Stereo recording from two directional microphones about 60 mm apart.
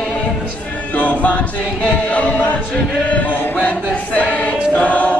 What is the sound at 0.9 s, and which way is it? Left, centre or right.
Choir, left.